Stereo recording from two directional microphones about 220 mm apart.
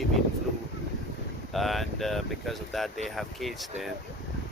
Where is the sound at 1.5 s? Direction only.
Centre (ahead or behind).